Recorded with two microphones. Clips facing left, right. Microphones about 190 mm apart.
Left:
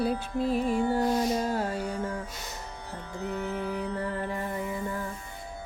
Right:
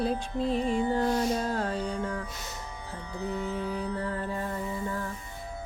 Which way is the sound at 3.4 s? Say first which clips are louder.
Even; 10° left (ahead or behind).